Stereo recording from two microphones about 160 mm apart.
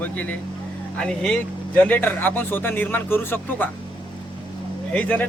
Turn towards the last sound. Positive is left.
turn(degrees=10)  # may be behind; listen again after turning